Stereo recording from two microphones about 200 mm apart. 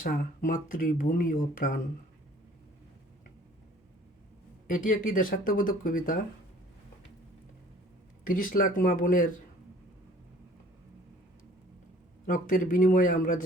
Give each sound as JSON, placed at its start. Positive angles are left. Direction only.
{"t": 0.0, "sound": "speech", "side_deg": 40}
{"t": 4.7, "sound": "speech", "side_deg": 40}
{"t": 8.2, "sound": "speech", "side_deg": 45}
{"t": 12.2, "sound": "speech", "side_deg": 40}